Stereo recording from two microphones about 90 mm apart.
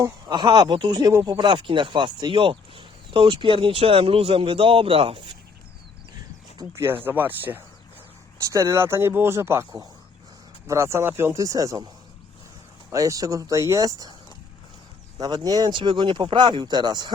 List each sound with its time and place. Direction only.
0.3 s speech: 55° right (ahead or behind)
6.7 s speech: 25° right (ahead or behind)
8.4 s speech: 35° right (ahead or behind)
11.3 s speech: 40° right (ahead or behind)
12.9 s speech: 40° right (ahead or behind)
15.2 s speech: 45° right (ahead or behind)
15.7 s speech: 65° right (ahead or behind)